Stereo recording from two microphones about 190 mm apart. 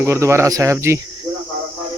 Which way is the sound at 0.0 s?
15° right (ahead or behind).